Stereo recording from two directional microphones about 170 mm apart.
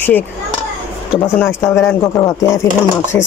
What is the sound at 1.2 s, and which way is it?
Speech, 15° left (ahead or behind).